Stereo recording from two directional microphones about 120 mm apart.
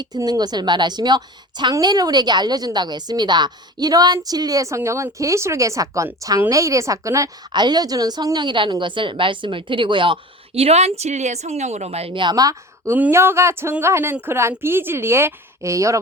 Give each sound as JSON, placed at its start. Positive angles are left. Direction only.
{"t": 0.0, "sound": "a woman's voice", "side_deg": -35}
{"t": 12.1, "sound": "speech", "side_deg": -35}